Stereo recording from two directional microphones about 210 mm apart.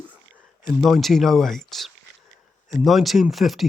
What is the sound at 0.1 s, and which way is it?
Speech, 5° right (ahead or behind).